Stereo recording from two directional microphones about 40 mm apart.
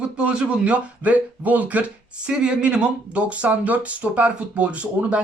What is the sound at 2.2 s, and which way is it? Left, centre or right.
Speech, right.